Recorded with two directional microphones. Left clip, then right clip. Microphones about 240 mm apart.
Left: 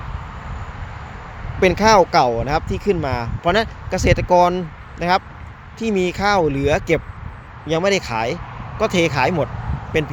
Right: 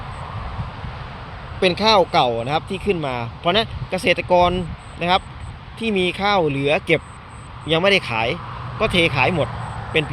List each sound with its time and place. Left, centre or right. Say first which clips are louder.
1.6 s speech: left 3 dB; left